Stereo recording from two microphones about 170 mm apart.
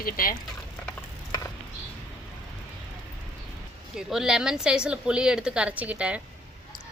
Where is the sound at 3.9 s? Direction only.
5° right (ahead or behind).